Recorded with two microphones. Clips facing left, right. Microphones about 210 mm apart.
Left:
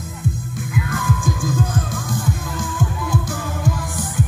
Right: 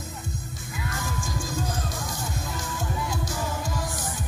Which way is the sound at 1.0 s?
55° left (ahead or behind).